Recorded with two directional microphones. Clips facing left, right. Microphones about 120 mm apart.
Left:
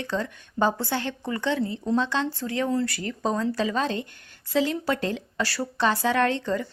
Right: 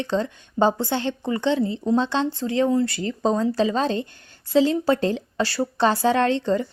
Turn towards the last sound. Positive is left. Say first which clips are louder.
# right 3 dB
turn(degrees=-30)  # may be behind; listen again after turning